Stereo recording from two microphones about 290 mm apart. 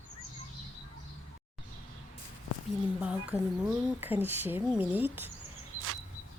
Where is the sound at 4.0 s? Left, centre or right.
Centre.